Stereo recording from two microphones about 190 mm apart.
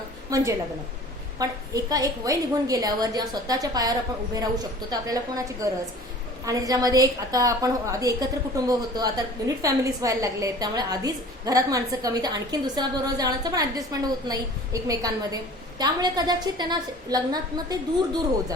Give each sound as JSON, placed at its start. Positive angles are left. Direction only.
{"t": 0.3, "sound": "a woman's voice", "side_deg": -15}